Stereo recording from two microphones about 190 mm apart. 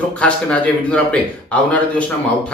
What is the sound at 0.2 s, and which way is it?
Speech, 5° left (ahead or behind).